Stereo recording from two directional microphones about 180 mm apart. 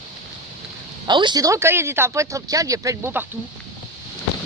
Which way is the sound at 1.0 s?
25° right (ahead or behind).